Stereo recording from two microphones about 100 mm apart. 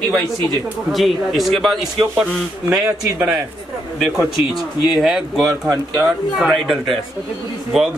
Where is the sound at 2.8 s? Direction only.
15° right (ahead or behind).